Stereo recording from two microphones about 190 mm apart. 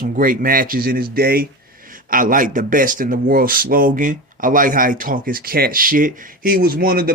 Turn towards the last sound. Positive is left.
turn(degrees=-50)  # may be behind; listen again after turning